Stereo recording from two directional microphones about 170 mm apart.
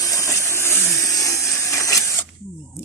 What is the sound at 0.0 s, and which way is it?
Vehicle, 20° left (ahead or behind).